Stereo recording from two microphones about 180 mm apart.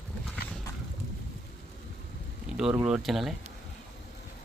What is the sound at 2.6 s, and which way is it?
Speech, 5° right (ahead or behind).